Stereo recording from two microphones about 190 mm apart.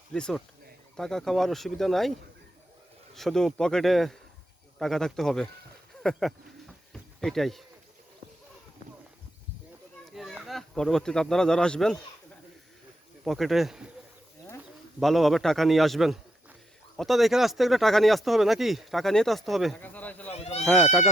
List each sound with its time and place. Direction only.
0.1 s speech: 5° left (ahead or behind)
3.2 s speech: centre (ahead or behind)
6.9 s a sound: centre (ahead or behind)
10.2 s speech: centre (ahead or behind)
13.2 s speech: centre (ahead or behind)
15.0 s speech: centre (ahead or behind)
20.3 s a sound: 35° left (ahead or behind)
20.7 s speech: centre (ahead or behind)